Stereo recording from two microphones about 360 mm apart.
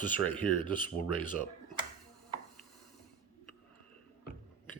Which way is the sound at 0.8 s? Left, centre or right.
Left.